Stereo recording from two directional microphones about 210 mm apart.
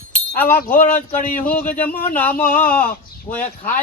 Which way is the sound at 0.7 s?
10° left (ahead or behind).